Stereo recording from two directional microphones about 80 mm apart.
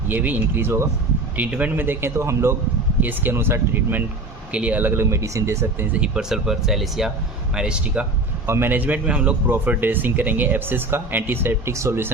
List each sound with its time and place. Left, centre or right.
0.1 s a man's voice: right
1.4 s a man's voice: centre; by 2.6 s right
3.0 s a man's voice: right
5.1 s speech: right
5.8 s speech: centre
8.4 s a man's voice: right